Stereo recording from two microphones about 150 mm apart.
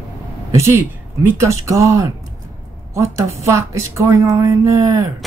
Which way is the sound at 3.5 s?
20° right (ahead or behind).